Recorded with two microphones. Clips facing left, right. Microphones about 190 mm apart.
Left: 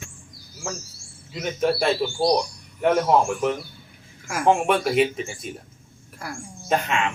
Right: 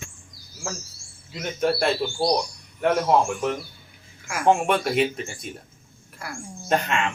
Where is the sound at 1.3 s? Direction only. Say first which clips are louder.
Left 1 dB; centre (ahead or behind).